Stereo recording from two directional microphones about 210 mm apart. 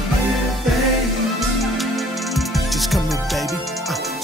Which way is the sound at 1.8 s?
Centre (ahead or behind).